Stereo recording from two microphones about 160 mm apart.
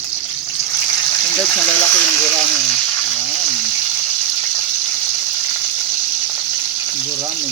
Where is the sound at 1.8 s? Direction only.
10° left (ahead or behind).